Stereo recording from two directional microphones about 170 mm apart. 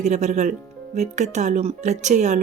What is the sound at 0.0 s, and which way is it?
Speech, 45° right (ahead or behind).